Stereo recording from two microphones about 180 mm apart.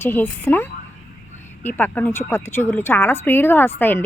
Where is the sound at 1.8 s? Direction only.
10° left (ahead or behind).